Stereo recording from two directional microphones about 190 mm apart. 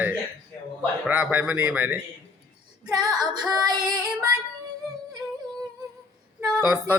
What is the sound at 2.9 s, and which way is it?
Female singing, 20° right (ahead or behind).